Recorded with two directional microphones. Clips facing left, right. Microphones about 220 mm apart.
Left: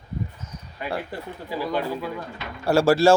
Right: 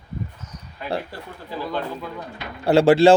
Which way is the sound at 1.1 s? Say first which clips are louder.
Left 2 dB; 10° left (ahead or behind).